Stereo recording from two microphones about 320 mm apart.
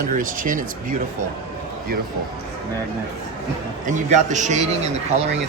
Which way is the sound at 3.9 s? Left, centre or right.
Right.